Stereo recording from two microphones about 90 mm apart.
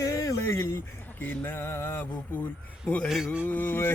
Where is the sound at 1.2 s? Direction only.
20° left (ahead or behind).